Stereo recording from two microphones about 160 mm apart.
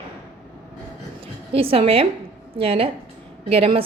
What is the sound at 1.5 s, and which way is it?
A woman's voice, 35° right (ahead or behind).